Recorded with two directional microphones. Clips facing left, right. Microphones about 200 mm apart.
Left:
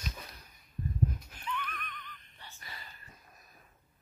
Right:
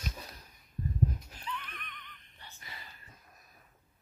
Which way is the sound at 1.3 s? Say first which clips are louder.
Left 3 dB; 35° right (ahead or behind).